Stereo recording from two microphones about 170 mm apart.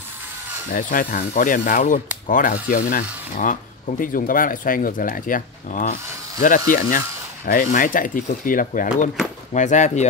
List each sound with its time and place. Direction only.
0.7 s speech: 50° left (ahead or behind)